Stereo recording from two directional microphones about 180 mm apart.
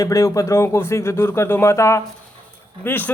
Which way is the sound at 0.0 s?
15° left (ahead or behind).